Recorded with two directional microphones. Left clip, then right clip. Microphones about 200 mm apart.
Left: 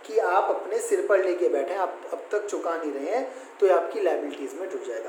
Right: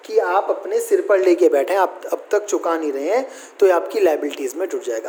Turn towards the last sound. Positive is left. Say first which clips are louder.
# right 9 dB
turn(degrees=-60)  # may be behind; listen again after turning